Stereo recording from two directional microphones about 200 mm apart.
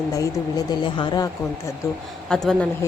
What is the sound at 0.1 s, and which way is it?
Speech, 15° left (ahead or behind).